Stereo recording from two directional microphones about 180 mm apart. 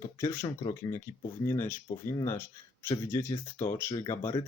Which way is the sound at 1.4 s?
10° left (ahead or behind).